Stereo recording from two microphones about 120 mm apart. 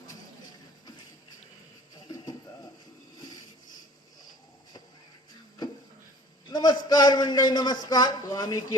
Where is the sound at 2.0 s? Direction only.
30° left (ahead or behind).